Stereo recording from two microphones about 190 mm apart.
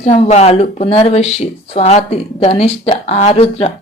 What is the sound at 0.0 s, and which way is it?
Speech, 35° left (ahead or behind).